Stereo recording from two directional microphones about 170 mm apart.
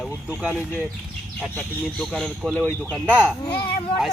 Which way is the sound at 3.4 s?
25° left (ahead or behind).